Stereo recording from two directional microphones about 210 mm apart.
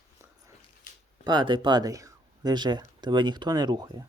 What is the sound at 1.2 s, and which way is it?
Speech, 20° right (ahead or behind).